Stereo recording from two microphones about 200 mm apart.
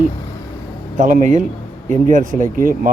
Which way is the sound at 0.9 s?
40° right (ahead or behind).